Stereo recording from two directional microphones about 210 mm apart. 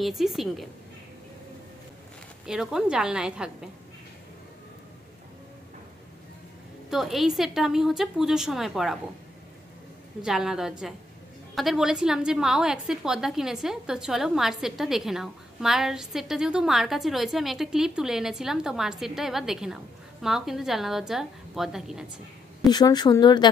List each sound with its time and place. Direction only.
0.0 s a woman's voice: centre (ahead or behind)
2.4 s a woman's voice: 5° right (ahead or behind)
6.9 s a woman's voice: centre (ahead or behind)
10.2 s a woman's voice: centre (ahead or behind)
22.7 s speech: 20° left (ahead or behind)